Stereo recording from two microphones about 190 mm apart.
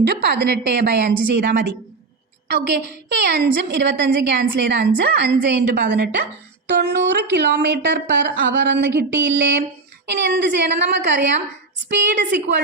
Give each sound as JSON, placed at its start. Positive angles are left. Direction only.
{"t": 0.0, "sound": "a woman's voice", "side_deg": -60}